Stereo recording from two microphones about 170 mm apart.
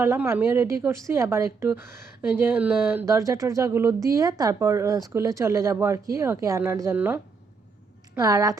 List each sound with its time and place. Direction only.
0.0 s a woman's voice: 15° right (ahead or behind)